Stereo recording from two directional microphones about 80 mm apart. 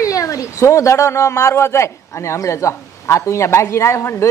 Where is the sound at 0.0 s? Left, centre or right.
Left.